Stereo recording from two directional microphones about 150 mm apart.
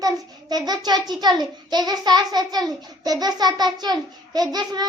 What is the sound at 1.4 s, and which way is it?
Child singing, 25° right (ahead or behind).